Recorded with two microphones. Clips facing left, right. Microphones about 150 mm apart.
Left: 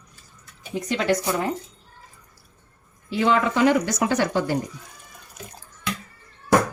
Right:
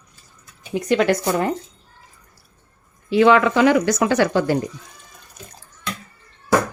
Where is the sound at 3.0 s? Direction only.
85° right.